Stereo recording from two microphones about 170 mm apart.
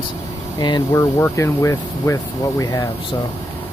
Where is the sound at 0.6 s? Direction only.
25° left (ahead or behind).